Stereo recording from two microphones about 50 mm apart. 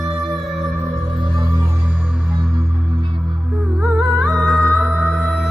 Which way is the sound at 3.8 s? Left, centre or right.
Right.